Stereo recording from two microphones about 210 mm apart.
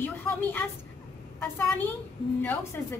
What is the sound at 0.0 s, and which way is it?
Speech, 10° left (ahead or behind).